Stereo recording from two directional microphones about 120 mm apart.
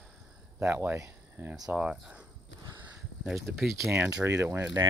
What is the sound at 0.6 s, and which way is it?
Speech, 15° right (ahead or behind).